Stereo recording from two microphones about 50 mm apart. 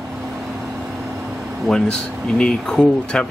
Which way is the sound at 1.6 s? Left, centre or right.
Centre.